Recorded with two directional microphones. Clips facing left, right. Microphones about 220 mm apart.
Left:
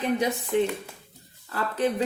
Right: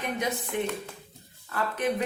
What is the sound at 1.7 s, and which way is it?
Speech, 30° left (ahead or behind).